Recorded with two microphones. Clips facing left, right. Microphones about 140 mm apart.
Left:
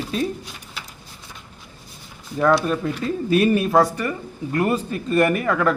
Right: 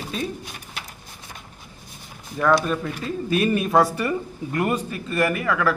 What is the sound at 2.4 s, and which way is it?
A man's voice, 5° left (ahead or behind).